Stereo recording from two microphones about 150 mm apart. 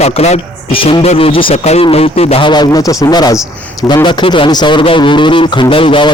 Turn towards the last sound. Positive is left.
turn(degrees=35)  # may be behind; listen again after turning